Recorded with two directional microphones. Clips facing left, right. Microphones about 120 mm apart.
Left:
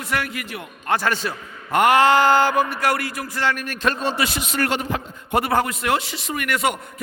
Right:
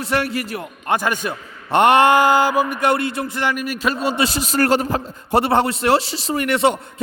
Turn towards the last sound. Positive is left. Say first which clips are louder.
# right 5 dB
turn(degrees=-30)  # may be behind; listen again after turning